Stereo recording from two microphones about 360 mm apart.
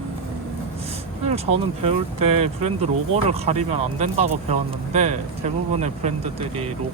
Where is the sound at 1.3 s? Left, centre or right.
Centre.